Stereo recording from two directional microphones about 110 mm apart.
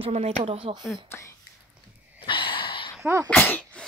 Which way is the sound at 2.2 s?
50° left (ahead or behind).